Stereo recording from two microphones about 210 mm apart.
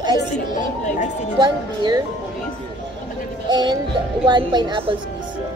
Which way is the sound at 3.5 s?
20° right (ahead or behind).